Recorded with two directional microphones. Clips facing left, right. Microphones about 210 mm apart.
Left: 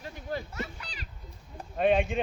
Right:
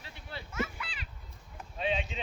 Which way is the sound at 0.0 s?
45° left (ahead or behind).